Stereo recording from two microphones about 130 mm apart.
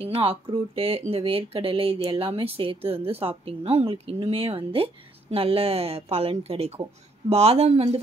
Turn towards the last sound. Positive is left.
turn(degrees=-50)  # may be behind; listen again after turning